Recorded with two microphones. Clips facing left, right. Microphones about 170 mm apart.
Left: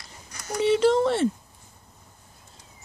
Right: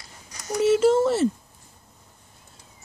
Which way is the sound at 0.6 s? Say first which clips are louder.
Right 2 dB; 5° right (ahead or behind).